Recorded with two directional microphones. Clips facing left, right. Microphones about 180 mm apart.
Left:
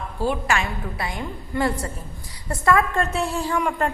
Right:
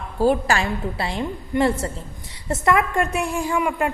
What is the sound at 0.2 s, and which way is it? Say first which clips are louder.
A woman's voice: right 5 dB; 40° right (ahead or behind).